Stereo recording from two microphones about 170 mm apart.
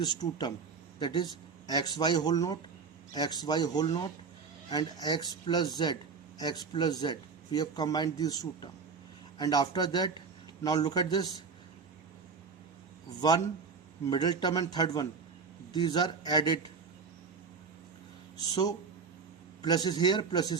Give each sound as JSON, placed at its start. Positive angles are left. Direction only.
{"t": 0.0, "sound": "speech", "side_deg": 25}
{"t": 13.1, "sound": "speech", "side_deg": 25}
{"t": 18.3, "sound": "speech", "side_deg": 25}